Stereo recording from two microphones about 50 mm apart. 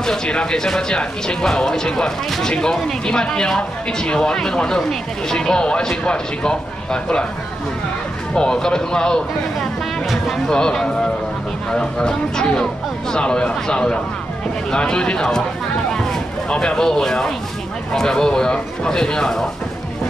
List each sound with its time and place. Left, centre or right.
0.0 s speech: centre
8.4 s speech: centre
15.9 s a sound: centre
17.9 s speech: centre